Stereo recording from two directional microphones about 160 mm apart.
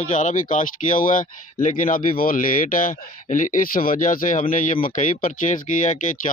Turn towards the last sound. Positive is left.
turn(degrees=50)  # may be behind; listen again after turning